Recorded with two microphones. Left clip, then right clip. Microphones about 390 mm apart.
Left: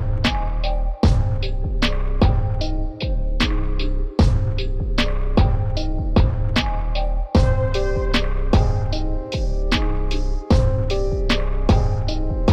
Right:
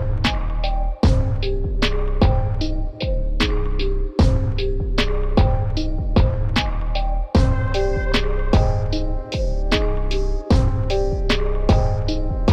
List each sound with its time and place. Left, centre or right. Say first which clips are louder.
0.2 s music: left 1 dB; centre